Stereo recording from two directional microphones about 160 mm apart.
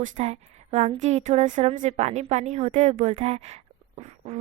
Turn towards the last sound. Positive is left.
turn(degrees=-45)  # may be behind; listen again after turning